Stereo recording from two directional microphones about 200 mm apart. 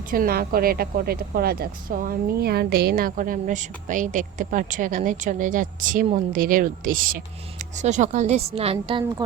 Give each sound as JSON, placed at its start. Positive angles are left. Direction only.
{"t": 0.1, "sound": "a woman's voice", "side_deg": -45}